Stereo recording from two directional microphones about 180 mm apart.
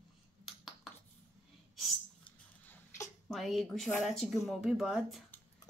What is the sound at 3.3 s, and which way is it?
A woman's voice, centre (ahead or behind).